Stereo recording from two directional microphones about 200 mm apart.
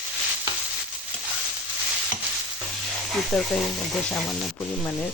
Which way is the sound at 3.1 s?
Centre (ahead or behind).